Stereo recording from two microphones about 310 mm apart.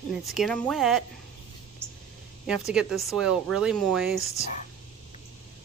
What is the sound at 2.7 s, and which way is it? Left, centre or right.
Speech, centre.